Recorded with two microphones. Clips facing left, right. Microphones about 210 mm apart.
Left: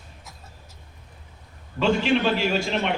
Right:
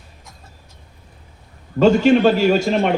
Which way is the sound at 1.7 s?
45° right (ahead or behind).